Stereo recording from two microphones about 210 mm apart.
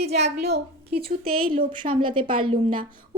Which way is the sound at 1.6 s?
20° right (ahead or behind).